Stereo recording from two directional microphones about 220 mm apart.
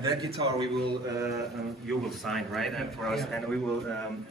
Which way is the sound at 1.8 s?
Centre (ahead or behind).